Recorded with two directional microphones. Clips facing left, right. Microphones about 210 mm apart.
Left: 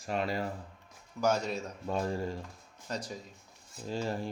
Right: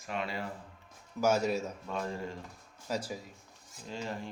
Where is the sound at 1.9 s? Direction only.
35° left (ahead or behind).